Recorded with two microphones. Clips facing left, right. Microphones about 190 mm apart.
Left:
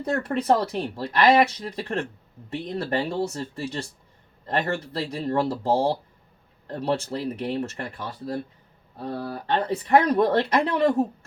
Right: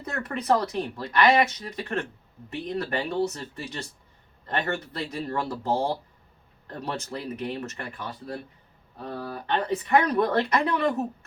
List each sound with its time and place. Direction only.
0.0 s speech: 30° left (ahead or behind)